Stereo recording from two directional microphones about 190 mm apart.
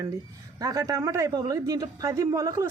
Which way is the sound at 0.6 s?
20° right (ahead or behind).